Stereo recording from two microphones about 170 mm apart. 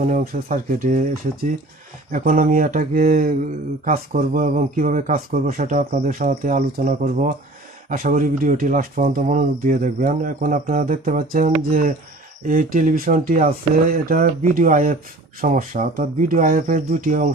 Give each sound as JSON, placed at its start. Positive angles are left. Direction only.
{"t": 0.0, "sound": "speech", "side_deg": -50}
{"t": 2.1, "sound": "speech", "side_deg": -55}